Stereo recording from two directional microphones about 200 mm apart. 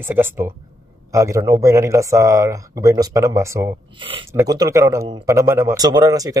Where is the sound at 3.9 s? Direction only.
25° right (ahead or behind).